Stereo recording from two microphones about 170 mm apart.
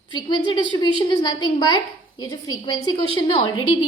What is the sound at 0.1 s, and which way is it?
A woman's voice, 25° left (ahead or behind).